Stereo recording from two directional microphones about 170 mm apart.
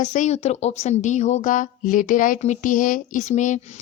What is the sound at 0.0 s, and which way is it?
A woman's voice, 45° left (ahead or behind).